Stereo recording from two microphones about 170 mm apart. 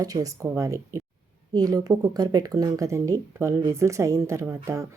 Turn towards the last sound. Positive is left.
turn(degrees=-15)  # may be behind; listen again after turning